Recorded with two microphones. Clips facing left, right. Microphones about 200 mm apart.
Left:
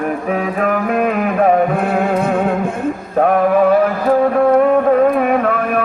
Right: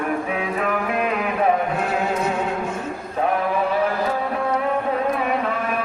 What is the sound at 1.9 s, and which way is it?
Music, 55° left (ahead or behind).